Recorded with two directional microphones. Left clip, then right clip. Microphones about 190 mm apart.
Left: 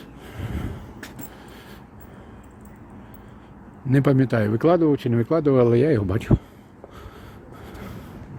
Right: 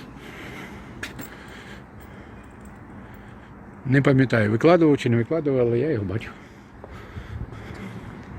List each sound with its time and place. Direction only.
3.8 s speech: 15° left (ahead or behind)
5.3 s speech: 40° left (ahead or behind)